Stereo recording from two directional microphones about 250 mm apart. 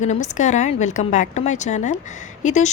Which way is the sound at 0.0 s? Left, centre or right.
Left.